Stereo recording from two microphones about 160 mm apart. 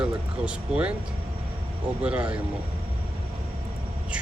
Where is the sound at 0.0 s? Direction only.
5° right (ahead or behind).